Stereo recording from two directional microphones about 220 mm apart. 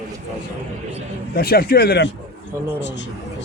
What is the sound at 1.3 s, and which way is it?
A man's voice, 45° left (ahead or behind).